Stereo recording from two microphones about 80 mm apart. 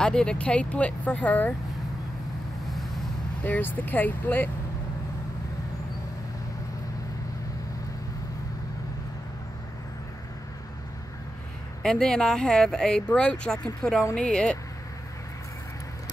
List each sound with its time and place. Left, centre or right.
0.0 s speech: centre
3.4 s speech: left
11.8 s speech: centre